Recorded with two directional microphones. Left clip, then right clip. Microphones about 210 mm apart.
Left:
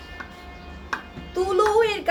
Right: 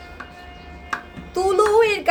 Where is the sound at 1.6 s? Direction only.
45° right (ahead or behind).